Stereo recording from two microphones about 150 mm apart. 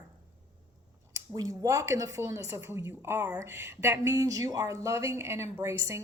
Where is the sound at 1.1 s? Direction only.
25° right (ahead or behind).